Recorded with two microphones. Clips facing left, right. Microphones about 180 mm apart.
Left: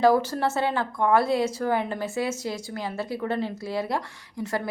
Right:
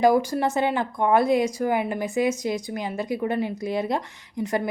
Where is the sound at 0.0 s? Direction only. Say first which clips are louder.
Right 1 dB; 15° right (ahead or behind).